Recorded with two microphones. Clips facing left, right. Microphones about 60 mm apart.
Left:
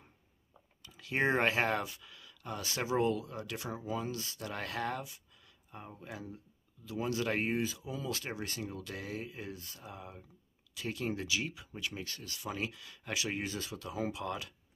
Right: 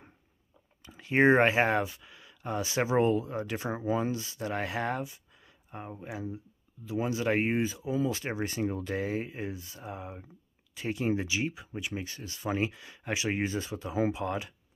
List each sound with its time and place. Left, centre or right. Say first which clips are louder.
0.8 s speech: right 9 dB; right
5.9 s speech: right 7 dB; centre
9.5 s speech: right 5 dB; centre
9.9 s speech: right 6 dB; right